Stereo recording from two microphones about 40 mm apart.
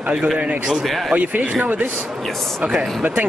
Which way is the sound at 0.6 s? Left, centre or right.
Centre.